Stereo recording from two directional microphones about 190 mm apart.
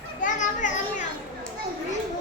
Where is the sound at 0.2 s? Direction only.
40° left (ahead or behind).